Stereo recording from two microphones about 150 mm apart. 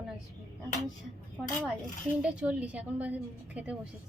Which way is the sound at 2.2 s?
5° right (ahead or behind).